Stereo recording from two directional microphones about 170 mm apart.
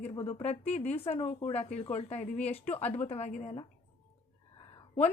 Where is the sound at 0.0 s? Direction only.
35° left (ahead or behind).